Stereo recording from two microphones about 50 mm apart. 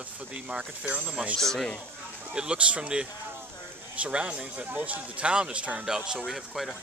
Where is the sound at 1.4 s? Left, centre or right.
Centre.